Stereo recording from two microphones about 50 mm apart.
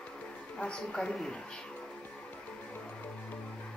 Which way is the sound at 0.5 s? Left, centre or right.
Centre.